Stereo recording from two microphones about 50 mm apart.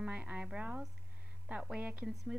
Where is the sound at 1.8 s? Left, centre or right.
Right.